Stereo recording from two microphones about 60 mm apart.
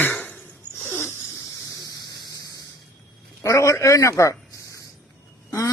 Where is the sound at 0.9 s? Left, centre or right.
Left.